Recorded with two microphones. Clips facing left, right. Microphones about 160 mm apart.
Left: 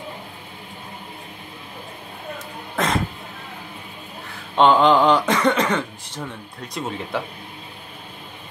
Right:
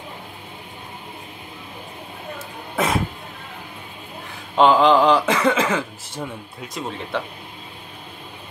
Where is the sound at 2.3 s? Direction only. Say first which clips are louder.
Right 2 dB; 10° right (ahead or behind).